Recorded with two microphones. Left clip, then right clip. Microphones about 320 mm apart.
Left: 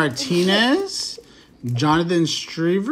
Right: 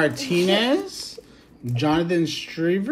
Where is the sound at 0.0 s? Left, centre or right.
Centre.